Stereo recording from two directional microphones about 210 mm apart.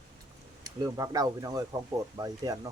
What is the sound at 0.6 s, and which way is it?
Speech, 20° right (ahead or behind).